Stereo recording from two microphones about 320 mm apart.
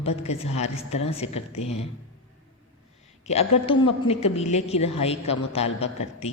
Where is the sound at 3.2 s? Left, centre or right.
Centre.